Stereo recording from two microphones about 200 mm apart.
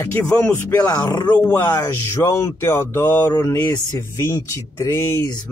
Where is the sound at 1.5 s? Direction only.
10° left (ahead or behind).